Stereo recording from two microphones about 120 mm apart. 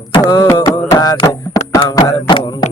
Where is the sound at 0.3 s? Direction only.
30° left (ahead or behind).